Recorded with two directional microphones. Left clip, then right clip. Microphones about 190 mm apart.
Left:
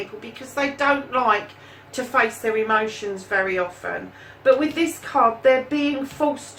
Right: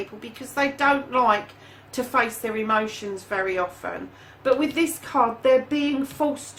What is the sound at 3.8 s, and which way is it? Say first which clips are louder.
Speech: left 3 dB; 50° right (ahead or behind).